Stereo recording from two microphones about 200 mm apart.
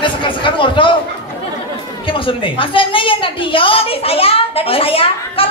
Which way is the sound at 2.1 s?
25° left (ahead or behind).